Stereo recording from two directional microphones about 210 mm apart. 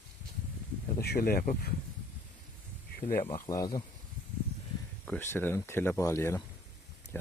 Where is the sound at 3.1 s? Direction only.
15° left (ahead or behind).